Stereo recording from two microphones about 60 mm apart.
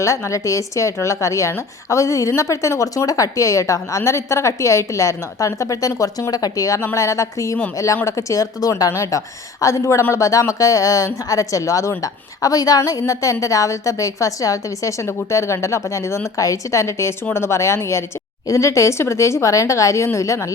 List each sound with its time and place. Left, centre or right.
0.0 s a woman's voice: left
6.7 s a woman's voice: left
8.9 s speech: left
13.4 s speech: left
15.0 s a woman's voice: left